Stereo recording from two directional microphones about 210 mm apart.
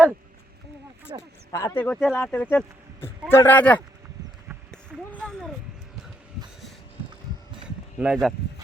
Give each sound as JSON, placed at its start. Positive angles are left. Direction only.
{"t": 1.1, "sound": "speech", "side_deg": -20}
{"t": 1.5, "sound": "speech", "side_deg": 10}
{"t": 5.1, "sound": "a sound", "side_deg": 5}
{"t": 7.6, "sound": "heart sounds", "side_deg": -5}